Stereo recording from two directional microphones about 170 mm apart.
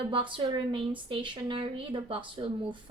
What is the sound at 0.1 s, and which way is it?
A woman's voice, 30° right (ahead or behind).